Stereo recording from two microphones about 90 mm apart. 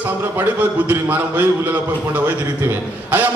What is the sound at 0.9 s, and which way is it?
Speech, 20° right (ahead or behind).